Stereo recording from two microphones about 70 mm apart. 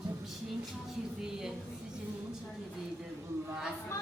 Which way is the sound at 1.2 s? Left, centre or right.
Centre.